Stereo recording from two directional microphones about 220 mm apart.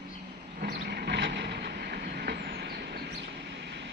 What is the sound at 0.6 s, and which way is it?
Train, 45° right (ahead or behind).